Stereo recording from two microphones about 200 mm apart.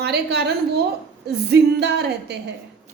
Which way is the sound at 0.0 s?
55° right (ahead or behind).